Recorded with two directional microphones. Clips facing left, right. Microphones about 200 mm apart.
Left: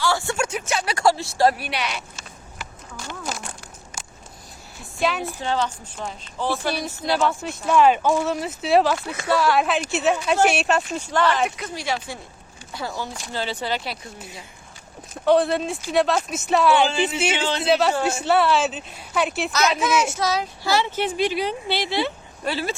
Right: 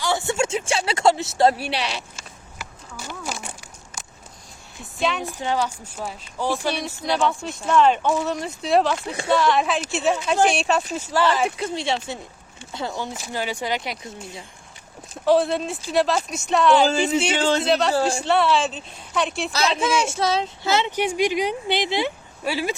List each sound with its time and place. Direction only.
0.0 s speech: 20° right (ahead or behind)
2.6 s a sound: 5° right (ahead or behind)
4.9 s a woman's voice: centre (ahead or behind)
5.2 s a woman's voice: 15° right (ahead or behind)
6.7 s speech: centre (ahead or behind)
9.0 s speech: 30° right (ahead or behind)
9.3 s a woman's voice: 5° left (ahead or behind)
11.4 s a woman's voice: 30° right (ahead or behind)
15.1 s speech: centre (ahead or behind)
16.8 s speech: 40° right (ahead or behind)
17.7 s speech: 5° left (ahead or behind)
17.9 s speech: 30° right (ahead or behind)
18.3 s speech: centre (ahead or behind)
19.5 s a woman's voice: 30° right (ahead or behind); by 22.7 s 15° right (ahead or behind)